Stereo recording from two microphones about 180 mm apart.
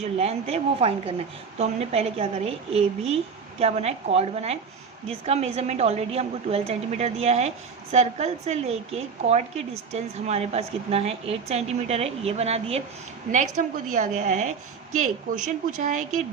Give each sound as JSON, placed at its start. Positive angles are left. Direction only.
{"t": 0.0, "sound": "a woman's voice", "side_deg": -35}